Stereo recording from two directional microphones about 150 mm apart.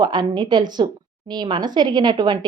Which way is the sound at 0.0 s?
30° right (ahead or behind).